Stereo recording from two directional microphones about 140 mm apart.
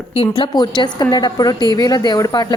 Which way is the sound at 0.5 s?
30° left (ahead or behind).